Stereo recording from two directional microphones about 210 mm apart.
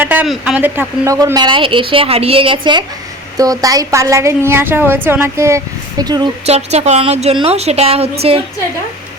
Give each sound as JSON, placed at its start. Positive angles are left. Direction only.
{"t": 0.0, "sound": "a woman's voice", "side_deg": -10}
{"t": 6.4, "sound": "a woman's voice", "side_deg": -30}